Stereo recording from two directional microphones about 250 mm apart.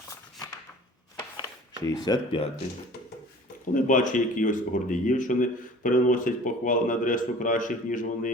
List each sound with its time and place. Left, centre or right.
1.8 s speech: centre
3.8 s speech: left